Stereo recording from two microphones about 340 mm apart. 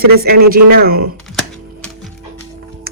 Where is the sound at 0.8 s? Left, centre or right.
Right.